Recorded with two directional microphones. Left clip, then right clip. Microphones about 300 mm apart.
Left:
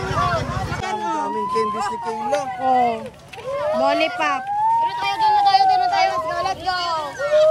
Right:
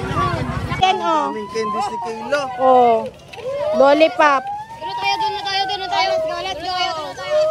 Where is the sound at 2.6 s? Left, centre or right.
Right.